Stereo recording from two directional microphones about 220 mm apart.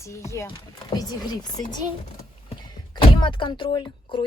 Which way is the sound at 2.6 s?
20° left (ahead or behind).